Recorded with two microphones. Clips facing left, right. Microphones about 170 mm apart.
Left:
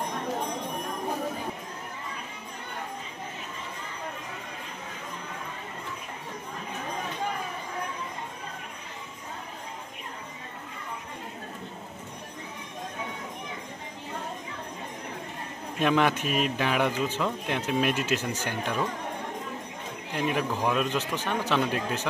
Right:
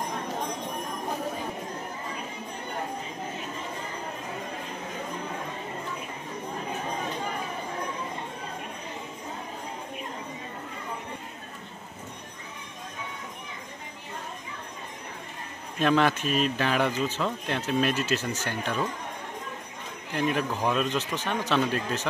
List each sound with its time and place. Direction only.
15.8 s a man's voice: 10° left (ahead or behind)
20.2 s a man's voice: 10° left (ahead or behind)